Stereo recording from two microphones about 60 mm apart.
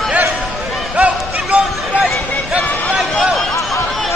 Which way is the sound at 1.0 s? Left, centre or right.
Right.